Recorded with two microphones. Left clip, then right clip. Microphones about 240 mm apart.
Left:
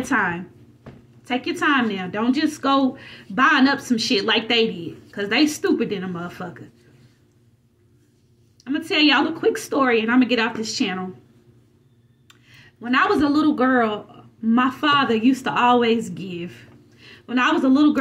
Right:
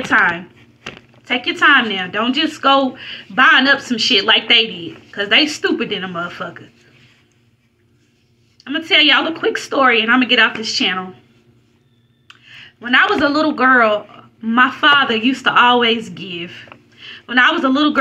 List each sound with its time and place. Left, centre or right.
0.1 s a woman's voice: left
1.4 s a woman's voice: left
8.6 s a woman's voice: left
12.5 s a sound: left
13.2 s a woman's voice: left
14.5 s a woman's voice: left